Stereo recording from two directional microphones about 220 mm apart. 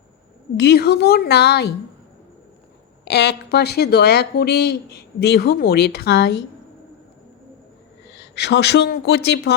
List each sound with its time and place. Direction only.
0.5 s speech: 50° left (ahead or behind)
3.0 s speech: 50° left (ahead or behind)
8.2 s speech: 50° left (ahead or behind)